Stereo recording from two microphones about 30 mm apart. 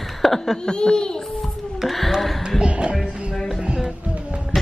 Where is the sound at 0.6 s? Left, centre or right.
Left.